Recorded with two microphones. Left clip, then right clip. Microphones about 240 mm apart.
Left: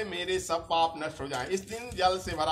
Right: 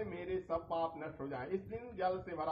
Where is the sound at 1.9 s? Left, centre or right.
Left.